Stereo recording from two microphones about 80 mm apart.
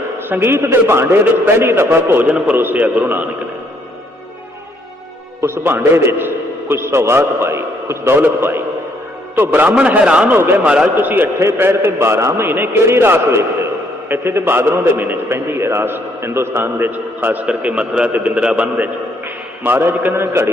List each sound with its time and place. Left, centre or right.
0.2 s a man's voice: right
2.2 s a man's voice: centre
5.4 s a man's voice: right; by 10.3 s centre
10.3 s a man's voice: right